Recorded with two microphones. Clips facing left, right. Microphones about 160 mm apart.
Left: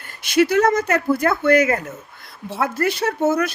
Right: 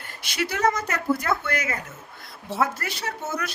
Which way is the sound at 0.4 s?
55° left (ahead or behind).